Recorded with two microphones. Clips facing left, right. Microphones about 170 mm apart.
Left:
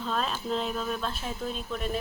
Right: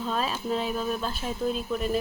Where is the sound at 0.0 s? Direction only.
5° right (ahead or behind).